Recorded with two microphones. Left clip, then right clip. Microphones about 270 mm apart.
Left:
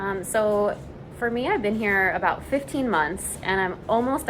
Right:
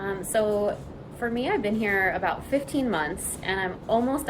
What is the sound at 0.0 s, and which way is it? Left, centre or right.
A woman's voice, centre.